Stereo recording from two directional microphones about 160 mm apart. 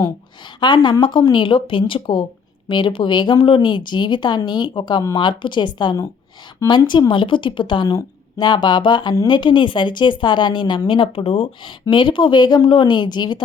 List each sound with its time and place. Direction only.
0.6 s a woman's voice: 30° left (ahead or behind)